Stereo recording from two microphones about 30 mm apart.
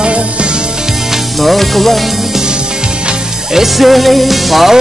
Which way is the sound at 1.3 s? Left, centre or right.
Centre.